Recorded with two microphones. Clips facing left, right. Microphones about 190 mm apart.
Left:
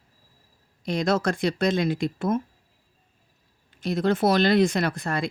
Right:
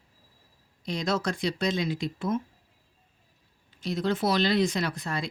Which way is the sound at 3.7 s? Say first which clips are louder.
Left 5 dB; 50° left (ahead or behind).